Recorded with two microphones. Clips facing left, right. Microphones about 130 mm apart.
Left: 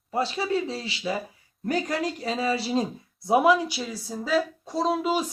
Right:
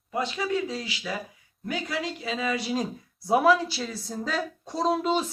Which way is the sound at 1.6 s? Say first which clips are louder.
Left 4 dB; 45° left (ahead or behind).